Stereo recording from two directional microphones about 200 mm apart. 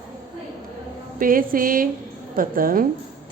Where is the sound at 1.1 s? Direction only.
45° right (ahead or behind).